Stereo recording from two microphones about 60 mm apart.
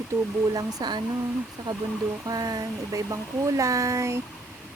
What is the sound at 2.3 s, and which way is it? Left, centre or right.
Speech, right.